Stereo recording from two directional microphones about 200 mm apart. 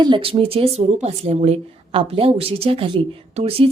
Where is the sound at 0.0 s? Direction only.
25° right (ahead or behind).